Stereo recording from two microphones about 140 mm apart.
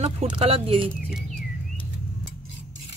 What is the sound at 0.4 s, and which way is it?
Speech, 45° right (ahead or behind).